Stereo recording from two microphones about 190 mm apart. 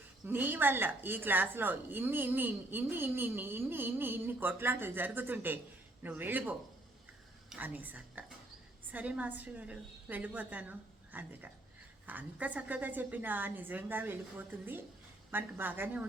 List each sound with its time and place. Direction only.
0.3 s a woman's voice: 10° right (ahead or behind)
7.5 s a woman's voice: 10° right (ahead or behind)